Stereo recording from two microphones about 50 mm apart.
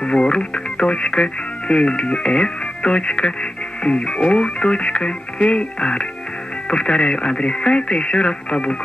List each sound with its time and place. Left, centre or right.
0.0 s speech: centre